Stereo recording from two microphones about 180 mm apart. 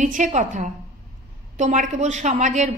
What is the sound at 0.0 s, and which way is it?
A woman's voice, 45° right (ahead or behind).